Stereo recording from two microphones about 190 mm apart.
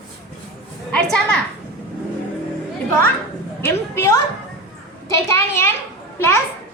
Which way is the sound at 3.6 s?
15° left (ahead or behind).